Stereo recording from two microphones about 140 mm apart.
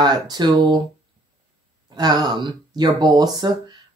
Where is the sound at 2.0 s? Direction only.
30° right (ahead or behind).